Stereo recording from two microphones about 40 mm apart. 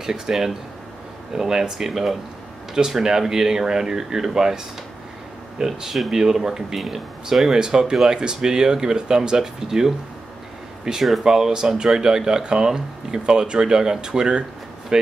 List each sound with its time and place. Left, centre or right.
0.0 s speech: centre
5.8 s speech: centre